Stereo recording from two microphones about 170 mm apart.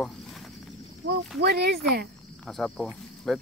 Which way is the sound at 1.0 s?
90° right.